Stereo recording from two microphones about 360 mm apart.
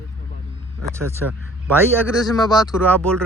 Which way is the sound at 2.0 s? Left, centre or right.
Centre.